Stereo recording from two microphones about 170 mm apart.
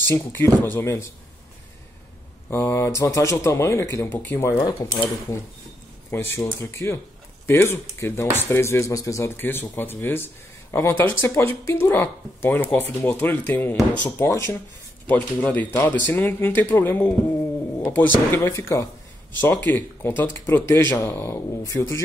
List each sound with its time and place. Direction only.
0.1 s speech: 10° left (ahead or behind)
2.5 s speech: 15° left (ahead or behind)
6.0 s speech: 15° left (ahead or behind)